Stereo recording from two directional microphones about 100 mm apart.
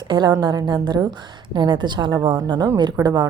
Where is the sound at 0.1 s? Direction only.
45° right (ahead or behind).